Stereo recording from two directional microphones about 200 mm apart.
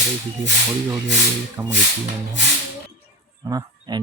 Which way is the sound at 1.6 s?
10° right (ahead or behind).